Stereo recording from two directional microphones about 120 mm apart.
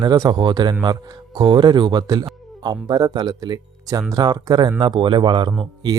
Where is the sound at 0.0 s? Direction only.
35° right (ahead or behind).